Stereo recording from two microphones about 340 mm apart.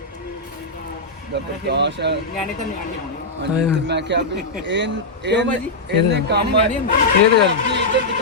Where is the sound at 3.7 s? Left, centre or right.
Right.